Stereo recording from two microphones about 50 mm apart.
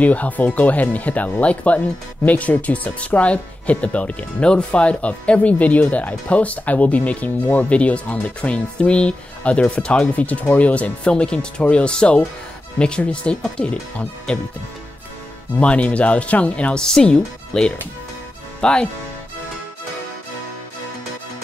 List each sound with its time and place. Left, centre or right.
0.0 s speech: left
15.6 s speech: left
16.7 s speech: centre